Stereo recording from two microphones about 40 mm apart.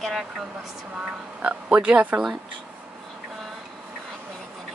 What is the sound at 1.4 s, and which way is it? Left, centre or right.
Speech, right.